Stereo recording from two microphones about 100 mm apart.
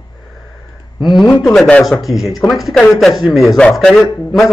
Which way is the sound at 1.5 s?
Centre (ahead or behind).